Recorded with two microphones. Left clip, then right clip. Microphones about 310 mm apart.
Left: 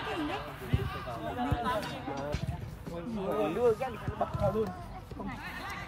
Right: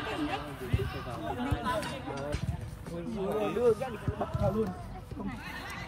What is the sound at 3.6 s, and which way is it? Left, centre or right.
Speech, left.